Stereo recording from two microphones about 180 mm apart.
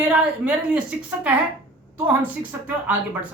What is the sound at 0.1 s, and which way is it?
A woman's voice, 5° right (ahead or behind).